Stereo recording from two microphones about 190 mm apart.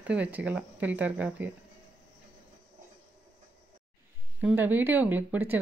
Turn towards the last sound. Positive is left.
turn(degrees=-10)  # may be behind; listen again after turning